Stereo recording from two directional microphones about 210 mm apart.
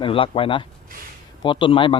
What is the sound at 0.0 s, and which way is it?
A man's voice, 25° left (ahead or behind).